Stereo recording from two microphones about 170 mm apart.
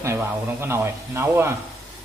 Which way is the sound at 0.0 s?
15° right (ahead or behind).